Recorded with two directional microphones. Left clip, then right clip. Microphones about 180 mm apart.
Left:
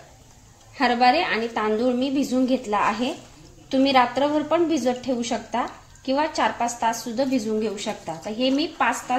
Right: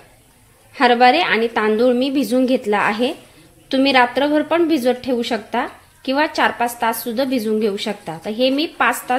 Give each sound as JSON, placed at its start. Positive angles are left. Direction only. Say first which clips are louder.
{"t": 0.7, "sound": "a woman's voice", "louder": "right 6 dB", "side_deg": -50}